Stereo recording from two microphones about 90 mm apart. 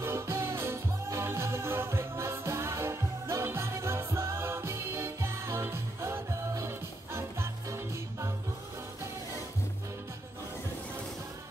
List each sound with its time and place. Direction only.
0.0 s music: 30° right (ahead or behind)